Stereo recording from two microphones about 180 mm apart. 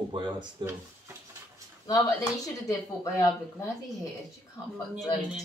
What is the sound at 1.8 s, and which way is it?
Speech, 20° left (ahead or behind).